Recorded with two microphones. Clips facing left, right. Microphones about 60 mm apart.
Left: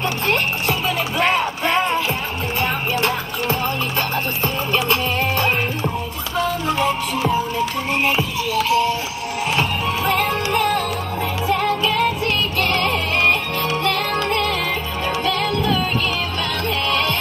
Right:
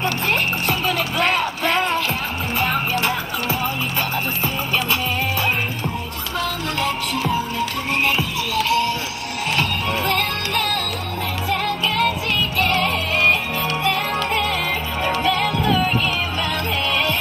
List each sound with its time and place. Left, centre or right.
0.0 s music: centre
6.9 s music: centre
11.8 s music: centre